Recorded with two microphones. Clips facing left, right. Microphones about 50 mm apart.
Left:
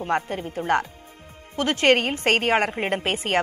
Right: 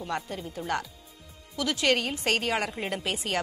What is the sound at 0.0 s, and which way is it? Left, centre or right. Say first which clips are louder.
Speech: left 8 dB; left.